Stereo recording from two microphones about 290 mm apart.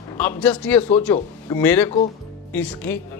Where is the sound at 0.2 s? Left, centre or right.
Centre.